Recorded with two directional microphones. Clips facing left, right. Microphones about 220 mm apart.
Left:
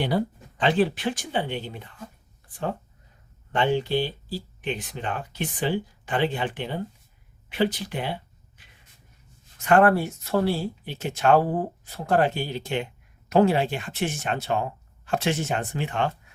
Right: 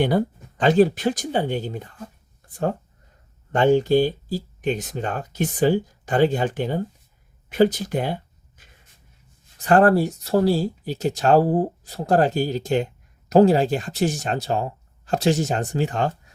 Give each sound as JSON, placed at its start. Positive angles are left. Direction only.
{"t": 0.0, "sound": "speech", "side_deg": -50}